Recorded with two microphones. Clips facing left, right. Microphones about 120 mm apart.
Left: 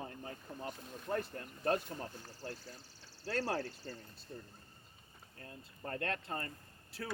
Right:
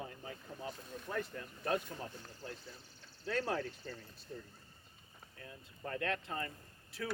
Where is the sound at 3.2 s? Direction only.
35° left (ahead or behind).